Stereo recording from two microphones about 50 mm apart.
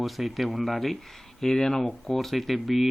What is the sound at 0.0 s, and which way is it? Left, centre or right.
Speech, centre.